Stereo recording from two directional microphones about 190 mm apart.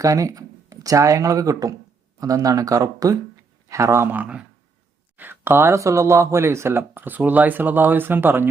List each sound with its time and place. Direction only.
0.0 s speech: 15° right (ahead or behind)